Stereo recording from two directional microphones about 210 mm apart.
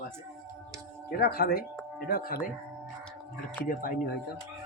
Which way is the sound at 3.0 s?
5° left (ahead or behind).